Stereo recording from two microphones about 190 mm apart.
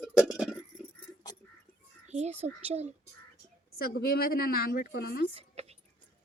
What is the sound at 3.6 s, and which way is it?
A woman's voice, 55° left (ahead or behind).